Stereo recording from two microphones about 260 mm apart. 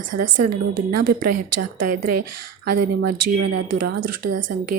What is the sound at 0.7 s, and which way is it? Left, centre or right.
Speech, right.